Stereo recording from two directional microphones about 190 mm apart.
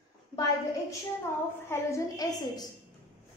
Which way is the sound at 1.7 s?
15° left (ahead or behind).